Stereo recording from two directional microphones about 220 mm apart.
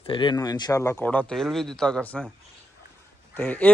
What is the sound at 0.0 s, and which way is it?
A man's voice, 20° left (ahead or behind).